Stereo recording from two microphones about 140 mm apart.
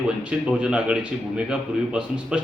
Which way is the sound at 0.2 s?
5° right (ahead or behind).